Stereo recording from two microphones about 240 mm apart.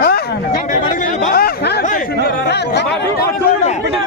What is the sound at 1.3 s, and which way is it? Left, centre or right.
Speech, left.